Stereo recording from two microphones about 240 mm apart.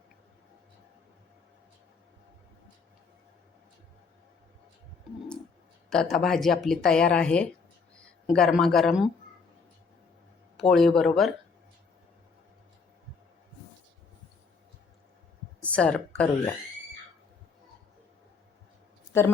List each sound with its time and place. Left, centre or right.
5.9 s a woman's voice: centre
10.6 s a woman's voice: centre
15.6 s a woman's voice: centre